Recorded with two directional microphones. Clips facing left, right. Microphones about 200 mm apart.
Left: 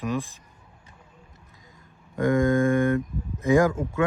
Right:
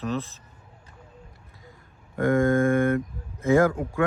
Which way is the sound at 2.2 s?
15° left (ahead or behind).